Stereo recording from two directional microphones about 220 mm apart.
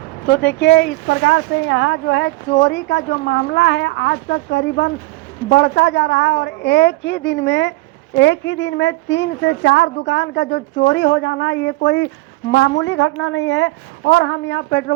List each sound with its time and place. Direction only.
0.3 s a woman's voice: 50° left (ahead or behind)